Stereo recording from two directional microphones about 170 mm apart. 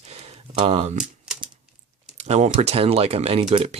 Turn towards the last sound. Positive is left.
turn(degrees=-35)  # may be behind; listen again after turning